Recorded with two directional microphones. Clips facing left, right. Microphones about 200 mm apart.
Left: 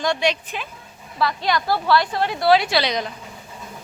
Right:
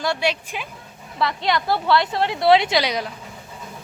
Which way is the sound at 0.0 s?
5° right (ahead or behind).